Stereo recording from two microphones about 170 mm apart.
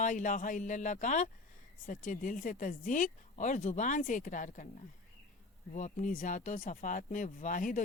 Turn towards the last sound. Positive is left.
turn(degrees=50)  # may be behind; listen again after turning